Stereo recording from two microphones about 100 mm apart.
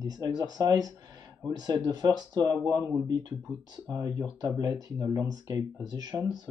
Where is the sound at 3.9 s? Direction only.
45° right (ahead or behind).